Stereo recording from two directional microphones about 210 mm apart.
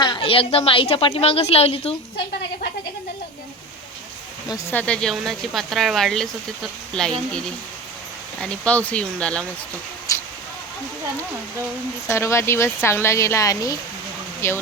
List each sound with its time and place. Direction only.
0.0 s a woman's voice: 25° left (ahead or behind)
4.4 s speech: 10° left (ahead or behind)
10.1 s a sound: 15° left (ahead or behind)
12.0 s speech: 15° left (ahead or behind)